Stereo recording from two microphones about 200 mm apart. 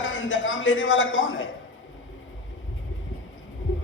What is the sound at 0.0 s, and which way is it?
A man's voice, 70° left (ahead or behind).